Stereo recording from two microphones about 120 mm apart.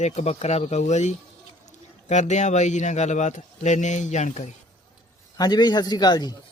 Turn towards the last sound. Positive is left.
turn(degrees=35)  # may be behind; listen again after turning